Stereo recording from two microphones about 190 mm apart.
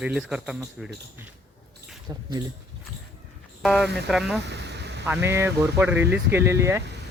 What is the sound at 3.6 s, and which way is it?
Speech, centre (ahead or behind).